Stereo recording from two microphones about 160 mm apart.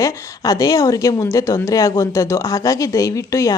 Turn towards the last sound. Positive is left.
turn(degrees=20)  # may be behind; listen again after turning